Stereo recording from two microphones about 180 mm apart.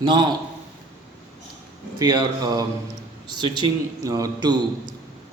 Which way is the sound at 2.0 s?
25° right (ahead or behind).